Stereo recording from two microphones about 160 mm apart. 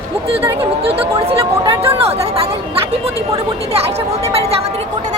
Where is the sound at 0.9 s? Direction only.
35° right (ahead or behind).